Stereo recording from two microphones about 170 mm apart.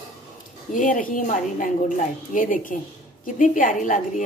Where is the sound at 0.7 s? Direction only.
50° left (ahead or behind).